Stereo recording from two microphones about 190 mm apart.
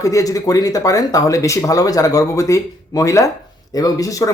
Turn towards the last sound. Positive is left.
turn(degrees=20)  # may be behind; listen again after turning